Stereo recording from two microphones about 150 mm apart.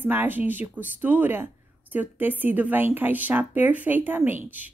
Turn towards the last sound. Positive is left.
turn(degrees=-10)  # may be behind; listen again after turning